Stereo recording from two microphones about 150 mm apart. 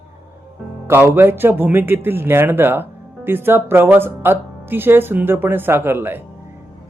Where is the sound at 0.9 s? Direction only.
15° right (ahead or behind).